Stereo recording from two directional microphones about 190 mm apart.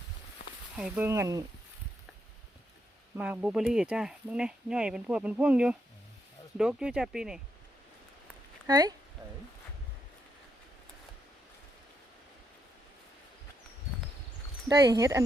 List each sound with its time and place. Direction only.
0.8 s speech: 5° right (ahead or behind)
3.2 s speech: 5° right (ahead or behind)
8.6 s speech: 20° right (ahead or behind)
14.7 s speech: 20° right (ahead or behind)